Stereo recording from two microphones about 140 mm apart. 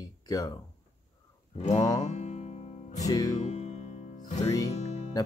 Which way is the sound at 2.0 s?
55° left (ahead or behind).